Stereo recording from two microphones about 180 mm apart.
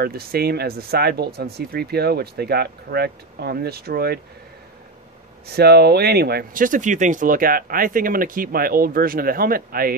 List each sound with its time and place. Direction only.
0.0 s speech: 60° right (ahead or behind)
5.5 s speech: 60° right (ahead or behind)